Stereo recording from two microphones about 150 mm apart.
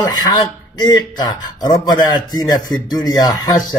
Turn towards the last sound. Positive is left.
turn(degrees=25)  # may be behind; listen again after turning